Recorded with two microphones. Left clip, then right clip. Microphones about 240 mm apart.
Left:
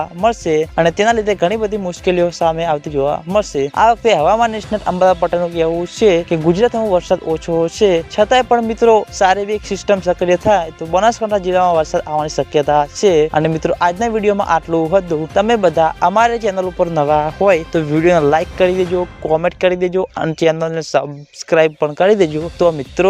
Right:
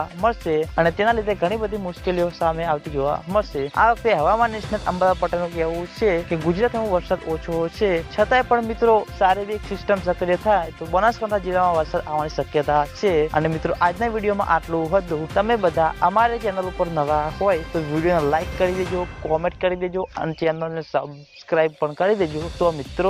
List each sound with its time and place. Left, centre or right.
0.0 s speech: left